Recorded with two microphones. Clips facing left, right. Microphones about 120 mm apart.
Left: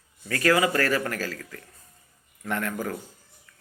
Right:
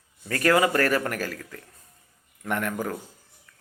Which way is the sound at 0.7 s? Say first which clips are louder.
Right 2 dB; 25° right (ahead or behind).